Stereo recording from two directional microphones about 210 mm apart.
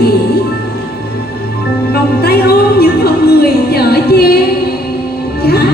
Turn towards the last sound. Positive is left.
turn(degrees=45)  # may be behind; listen again after turning